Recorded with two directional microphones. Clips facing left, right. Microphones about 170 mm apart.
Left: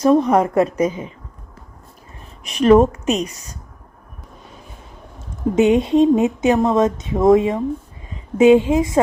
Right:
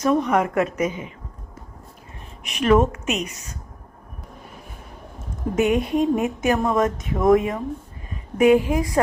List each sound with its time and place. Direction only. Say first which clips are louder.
0.0 s a woman's voice: left 5 dB; 35° left (ahead or behind)
2.4 s a woman's voice: left 6 dB; 35° left (ahead or behind)
5.5 s speech: left 6 dB; 25° left (ahead or behind)